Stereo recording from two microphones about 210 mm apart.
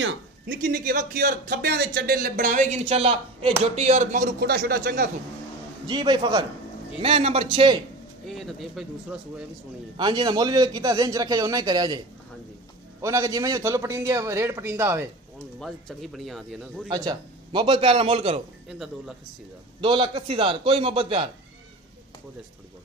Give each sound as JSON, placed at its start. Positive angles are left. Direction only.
{"t": 0.5, "sound": "speech", "side_deg": -45}
{"t": 5.9, "sound": "a man's voice", "side_deg": -20}
{"t": 8.3, "sound": "speech", "side_deg": 0}
{"t": 9.9, "sound": "a man's voice", "side_deg": -20}
{"t": 13.0, "sound": "a man's voice", "side_deg": -15}
{"t": 15.6, "sound": "speech", "side_deg": 0}
{"t": 16.9, "sound": "a man's voice", "side_deg": -20}
{"t": 18.7, "sound": "speech", "side_deg": 0}
{"t": 19.8, "sound": "a man's voice", "side_deg": -25}